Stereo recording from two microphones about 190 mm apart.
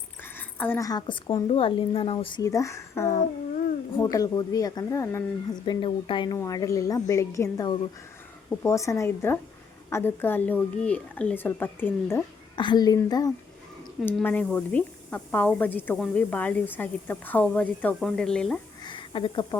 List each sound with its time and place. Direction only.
0.2 s speech: 10° left (ahead or behind)
12.5 s speech: 25° left (ahead or behind)
14.3 s speech: 5° left (ahead or behind)
18.8 s a sound: 25° left (ahead or behind)